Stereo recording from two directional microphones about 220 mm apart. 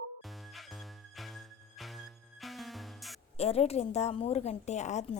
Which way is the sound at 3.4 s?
25° left (ahead or behind).